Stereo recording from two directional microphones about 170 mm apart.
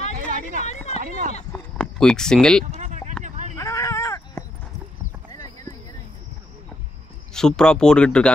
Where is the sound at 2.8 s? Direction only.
45° right (ahead or behind).